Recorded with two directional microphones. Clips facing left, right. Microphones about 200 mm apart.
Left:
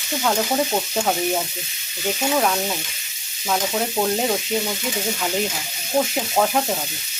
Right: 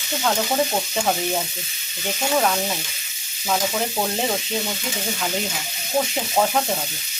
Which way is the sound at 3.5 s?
Centre (ahead or behind).